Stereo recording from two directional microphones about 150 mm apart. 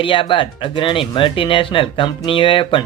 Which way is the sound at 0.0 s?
35° left (ahead or behind).